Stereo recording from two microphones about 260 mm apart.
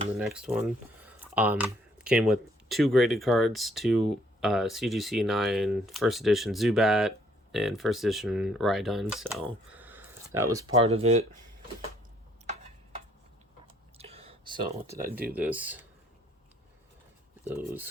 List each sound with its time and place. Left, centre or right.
0.2 s speech: centre
1.0 s a sound: centre
2.0 s speech: centre; by 11.3 s right
14.0 s a sound: right
14.9 s speech: right
15.3 s speech: centre
17.4 s speech: centre